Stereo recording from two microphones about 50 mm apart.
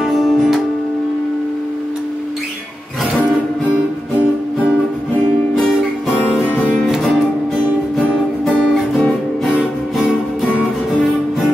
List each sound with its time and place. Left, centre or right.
0.0 s music: centre
3.2 s music: right